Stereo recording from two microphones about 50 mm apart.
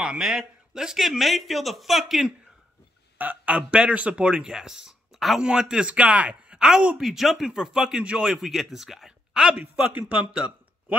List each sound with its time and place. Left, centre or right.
0.2 s a man's voice: centre
3.2 s speech: right; by 5.4 s centre
5.4 s speech: centre
5.9 s speech: right
7.0 s speech: centre
9.4 s speech: right